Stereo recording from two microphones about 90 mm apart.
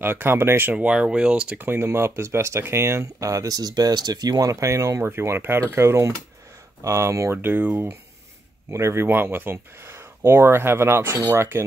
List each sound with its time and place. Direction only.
0.0 s speech: 25° right (ahead or behind)
0.7 s speech: 10° right (ahead or behind)
1.6 s speech: 25° right (ahead or behind)